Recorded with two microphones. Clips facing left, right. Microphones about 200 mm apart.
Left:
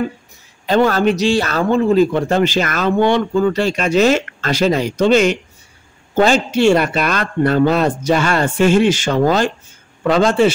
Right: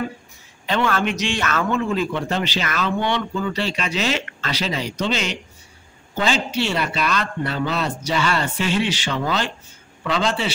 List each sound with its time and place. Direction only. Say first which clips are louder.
0.7 s a man's voice: left 8 dB; 40° left (ahead or behind)